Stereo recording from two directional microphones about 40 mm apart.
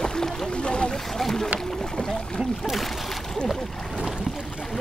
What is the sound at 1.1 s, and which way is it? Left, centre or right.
Boat, centre.